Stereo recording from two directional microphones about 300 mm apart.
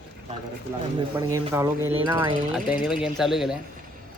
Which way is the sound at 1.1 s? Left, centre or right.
Centre.